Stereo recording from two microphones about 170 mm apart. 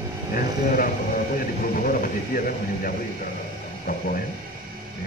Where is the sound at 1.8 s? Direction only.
55° left (ahead or behind).